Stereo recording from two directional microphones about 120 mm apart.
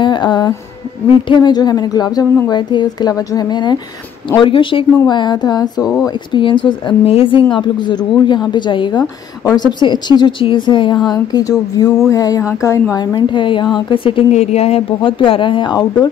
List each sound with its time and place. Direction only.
0.0 s speech: 40° left (ahead or behind)
14.3 s speech: 65° left (ahead or behind); by 16.1 s 40° left (ahead or behind)